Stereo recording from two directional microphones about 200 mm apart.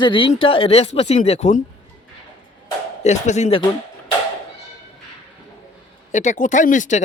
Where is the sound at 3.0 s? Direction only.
35° left (ahead or behind).